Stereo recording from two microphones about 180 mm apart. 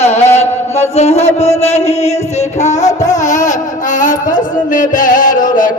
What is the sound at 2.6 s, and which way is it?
Music, 40° left (ahead or behind).